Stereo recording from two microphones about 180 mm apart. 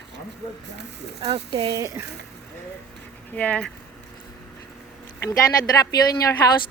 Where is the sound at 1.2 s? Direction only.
35° right (ahead or behind).